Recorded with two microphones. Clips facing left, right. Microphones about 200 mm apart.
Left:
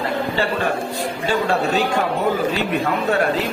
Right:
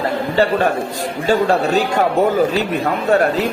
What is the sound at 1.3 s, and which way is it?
A man's voice, 40° right (ahead or behind).